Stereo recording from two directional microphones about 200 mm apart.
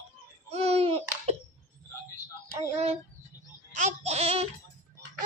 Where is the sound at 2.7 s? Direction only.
30° right (ahead or behind).